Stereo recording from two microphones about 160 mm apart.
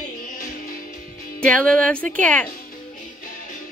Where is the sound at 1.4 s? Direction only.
5° left (ahead or behind).